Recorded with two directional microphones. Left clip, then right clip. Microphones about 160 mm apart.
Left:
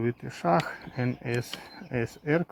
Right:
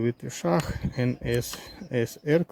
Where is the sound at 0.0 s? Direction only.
45° right (ahead or behind).